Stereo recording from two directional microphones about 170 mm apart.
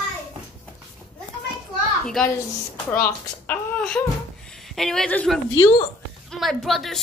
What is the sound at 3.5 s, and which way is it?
Speech, 5° left (ahead or behind).